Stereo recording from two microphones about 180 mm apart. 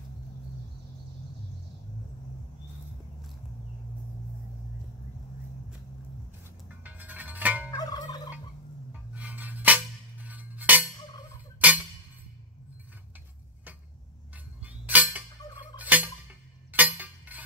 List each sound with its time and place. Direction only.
6.8 s music: 10° right (ahead or behind)
7.7 s fowl: 20° left (ahead or behind)
9.1 s a sound: 10° right (ahead or behind)
11.6 s music: 10° right (ahead or behind)
14.3 s a sound: 10° right (ahead or behind)
15.8 s fowl: 10° right (ahead or behind)
16.7 s chink: 10° right (ahead or behind)